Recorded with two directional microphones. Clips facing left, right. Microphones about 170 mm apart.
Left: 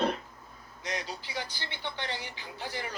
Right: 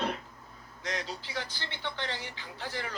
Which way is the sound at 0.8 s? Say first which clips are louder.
Even; 15° left (ahead or behind).